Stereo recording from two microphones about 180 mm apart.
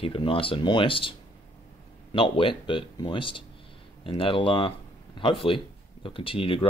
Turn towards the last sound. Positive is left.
turn(degrees=30)  # may be behind; listen again after turning